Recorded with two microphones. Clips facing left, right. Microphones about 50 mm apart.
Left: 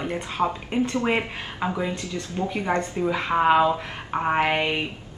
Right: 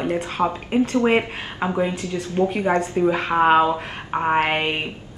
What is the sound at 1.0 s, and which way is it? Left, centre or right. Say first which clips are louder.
Speech: right 7 dB; right.